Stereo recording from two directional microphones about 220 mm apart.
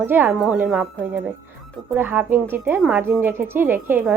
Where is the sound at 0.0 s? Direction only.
10° right (ahead or behind).